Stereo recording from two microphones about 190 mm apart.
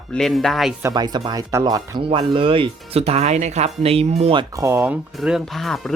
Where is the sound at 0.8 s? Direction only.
20° right (ahead or behind).